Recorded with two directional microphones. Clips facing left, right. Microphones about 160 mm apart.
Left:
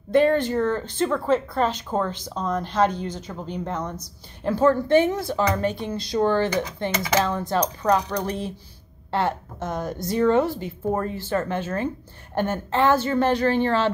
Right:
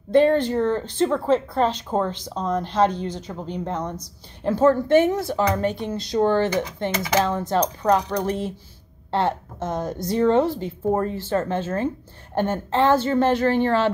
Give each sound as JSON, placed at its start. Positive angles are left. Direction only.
{"t": 0.1, "sound": "speech", "side_deg": -25}